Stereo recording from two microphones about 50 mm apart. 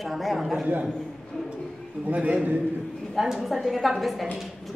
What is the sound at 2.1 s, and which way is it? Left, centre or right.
Speech, right.